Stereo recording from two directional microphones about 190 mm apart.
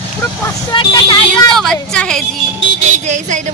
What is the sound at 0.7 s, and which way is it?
Vehicle, 25° left (ahead or behind).